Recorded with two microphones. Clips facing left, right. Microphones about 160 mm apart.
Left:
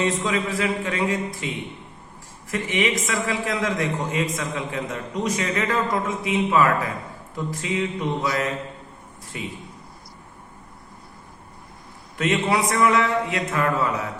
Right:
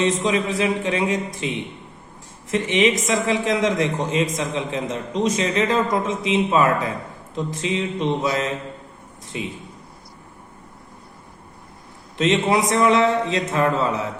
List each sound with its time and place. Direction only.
0.0 s a man's voice: 20° right (ahead or behind)
2.5 s a man's voice: 25° right (ahead or behind)
12.1 s a man's voice: 20° right (ahead or behind)